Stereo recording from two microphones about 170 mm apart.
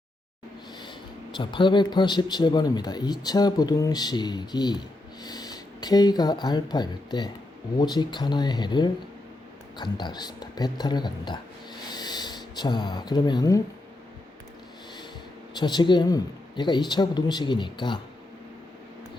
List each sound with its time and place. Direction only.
1.4 s speech: 30° left (ahead or behind)
11.9 s a sound: 25° left (ahead or behind)
15.5 s speech: 25° left (ahead or behind)